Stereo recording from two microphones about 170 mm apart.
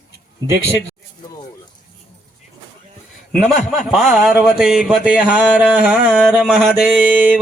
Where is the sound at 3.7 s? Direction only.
Centre (ahead or behind).